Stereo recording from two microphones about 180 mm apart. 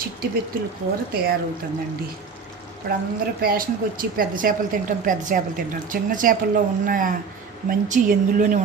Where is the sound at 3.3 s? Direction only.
55° right (ahead or behind).